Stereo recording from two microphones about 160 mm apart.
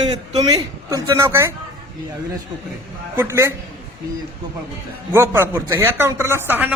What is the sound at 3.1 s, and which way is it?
Speech, 15° right (ahead or behind).